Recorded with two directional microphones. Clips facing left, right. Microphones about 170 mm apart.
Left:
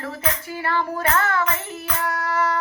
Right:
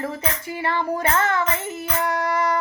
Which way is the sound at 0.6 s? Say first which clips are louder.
Right 1 dB; 20° right (ahead or behind).